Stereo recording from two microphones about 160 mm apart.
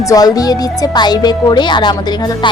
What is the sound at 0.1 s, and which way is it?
Speech, 25° left (ahead or behind).